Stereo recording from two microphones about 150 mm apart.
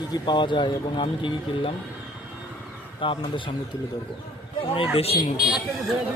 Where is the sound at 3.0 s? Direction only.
35° left (ahead or behind).